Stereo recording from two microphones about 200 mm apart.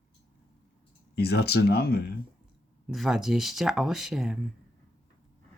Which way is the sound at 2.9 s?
Centre (ahead or behind).